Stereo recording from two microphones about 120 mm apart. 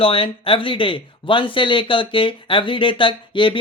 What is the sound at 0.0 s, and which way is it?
Speech, 50° left (ahead or behind).